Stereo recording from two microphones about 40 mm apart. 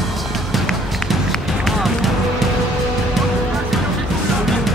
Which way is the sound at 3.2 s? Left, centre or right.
Centre.